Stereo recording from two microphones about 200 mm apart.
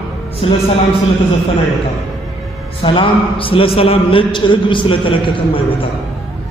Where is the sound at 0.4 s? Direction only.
30° left (ahead or behind).